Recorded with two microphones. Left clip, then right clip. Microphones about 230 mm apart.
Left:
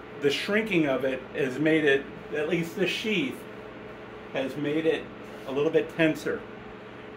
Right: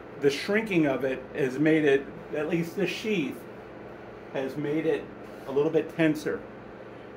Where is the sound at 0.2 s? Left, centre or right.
Centre.